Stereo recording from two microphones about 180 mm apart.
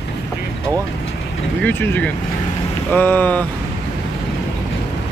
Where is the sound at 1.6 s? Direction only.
10° left (ahead or behind).